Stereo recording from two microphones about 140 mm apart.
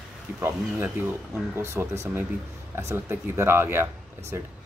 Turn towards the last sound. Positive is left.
turn(degrees=-15)  # may be behind; listen again after turning